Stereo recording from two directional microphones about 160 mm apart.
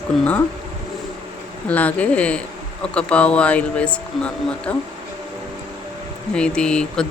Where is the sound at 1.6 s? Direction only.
10° left (ahead or behind).